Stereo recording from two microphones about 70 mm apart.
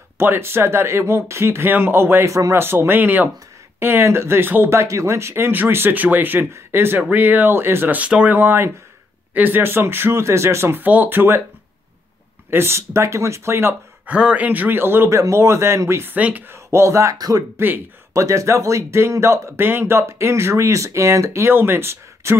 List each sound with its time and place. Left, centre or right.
0.2 s speech: right
2.2 s speech: right
2.6 s speech: right
4.7 s speech: right
8.0 s speech: centre
8.4 s speech: right
10.8 s speech: right
12.4 s speech: right
14.0 s speech: centre; by 16.1 s right
16.1 s speech: right
16.4 s speech: right
17.6 s speech: right
18.1 s speech: right